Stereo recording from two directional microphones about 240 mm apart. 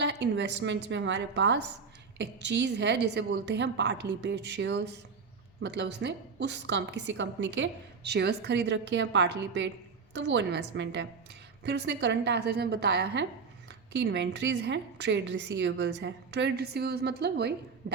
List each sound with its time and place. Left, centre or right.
0.0 s a woman's voice: right